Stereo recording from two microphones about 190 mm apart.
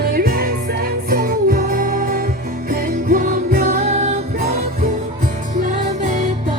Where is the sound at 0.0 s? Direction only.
50° right (ahead or behind); by 4.2 s 35° right (ahead or behind).